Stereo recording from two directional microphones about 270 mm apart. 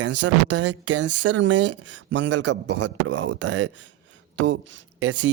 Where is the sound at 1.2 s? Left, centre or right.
Right.